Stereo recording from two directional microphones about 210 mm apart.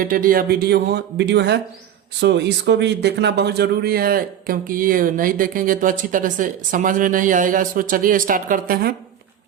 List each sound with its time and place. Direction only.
0.0 s speech: 40° right (ahead or behind)